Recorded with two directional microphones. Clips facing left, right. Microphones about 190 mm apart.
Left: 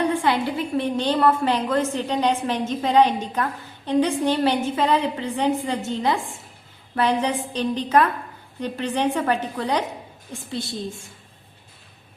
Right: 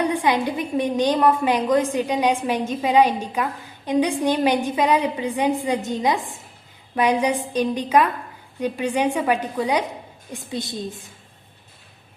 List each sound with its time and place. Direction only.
0.0 s a woman's voice: 15° right (ahead or behind)